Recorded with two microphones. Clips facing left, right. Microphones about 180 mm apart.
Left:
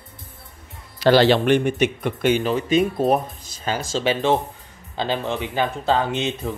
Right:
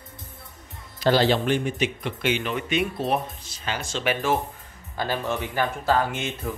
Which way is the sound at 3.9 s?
25° left (ahead or behind).